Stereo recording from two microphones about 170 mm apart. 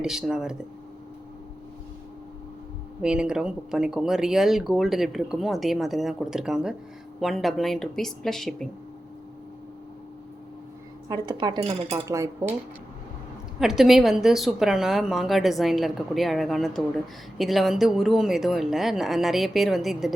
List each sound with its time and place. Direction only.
0.0 s speech: 5° right (ahead or behind)
3.0 s speech: 5° right (ahead or behind)
11.1 s speech: 25° right (ahead or behind)
13.6 s speech: centre (ahead or behind)